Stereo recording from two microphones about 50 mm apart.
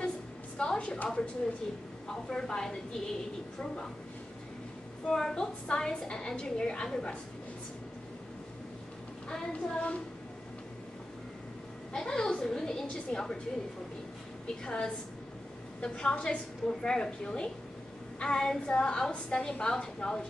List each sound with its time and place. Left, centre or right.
0.6 s a woman's voice: centre
1.0 s child singing: left
2.2 s a woman's voice: centre
5.0 s a woman's voice: centre
9.3 s child singing: left
11.9 s a woman's voice: centre
14.6 s a woman's voice: centre